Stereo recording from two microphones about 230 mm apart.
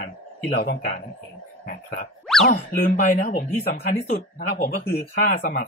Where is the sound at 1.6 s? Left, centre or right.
Left.